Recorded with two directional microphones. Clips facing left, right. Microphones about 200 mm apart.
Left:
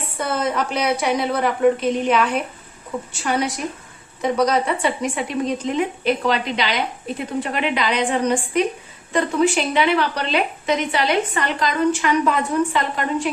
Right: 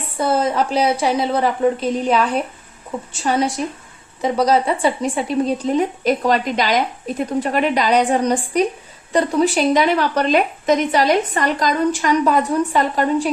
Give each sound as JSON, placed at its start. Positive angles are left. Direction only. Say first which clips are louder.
{"t": 0.2, "sound": "a woman's voice", "louder": "right 4 dB", "side_deg": -30}